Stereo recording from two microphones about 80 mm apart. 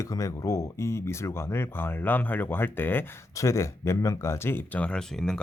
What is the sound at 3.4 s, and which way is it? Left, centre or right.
Speech, left.